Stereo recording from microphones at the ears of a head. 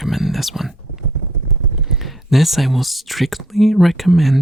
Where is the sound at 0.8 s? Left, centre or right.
Right.